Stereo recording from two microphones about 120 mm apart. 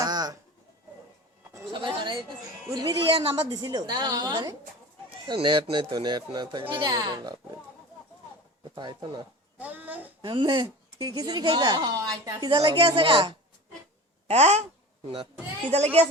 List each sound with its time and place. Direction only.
0.0 s a sound: 35° right (ahead or behind)
1.7 s a sound: 45° right (ahead or behind)
2.7 s speech: 45° right (ahead or behind)
8.7 s speech: 40° right (ahead or behind)
9.6 s a child's voice: 15° right (ahead or behind)
10.2 s speech: 40° right (ahead or behind)
12.7 s a woman's voice: 50° right (ahead or behind)
14.3 s speech: 65° right (ahead or behind)
15.7 s speech: 60° right (ahead or behind)